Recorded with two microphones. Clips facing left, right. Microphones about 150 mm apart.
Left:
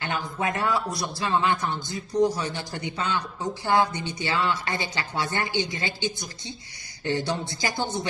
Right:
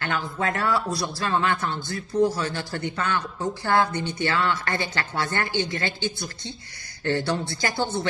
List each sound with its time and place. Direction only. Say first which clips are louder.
0.0 s a woman's voice: right 1 dB; 15° left (ahead or behind)